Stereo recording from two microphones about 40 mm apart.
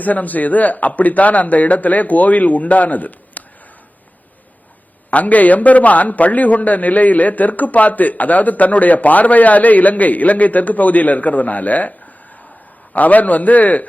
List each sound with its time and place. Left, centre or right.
0.0 s a man's voice: left
5.1 s a man's voice: left